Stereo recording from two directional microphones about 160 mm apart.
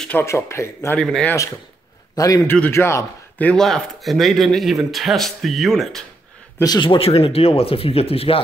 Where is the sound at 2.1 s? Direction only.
20° left (ahead or behind).